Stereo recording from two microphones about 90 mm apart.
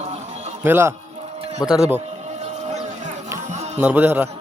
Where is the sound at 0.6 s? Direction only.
25° right (ahead or behind).